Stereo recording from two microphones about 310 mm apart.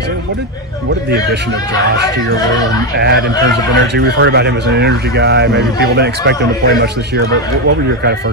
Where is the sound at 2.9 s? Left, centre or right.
Right.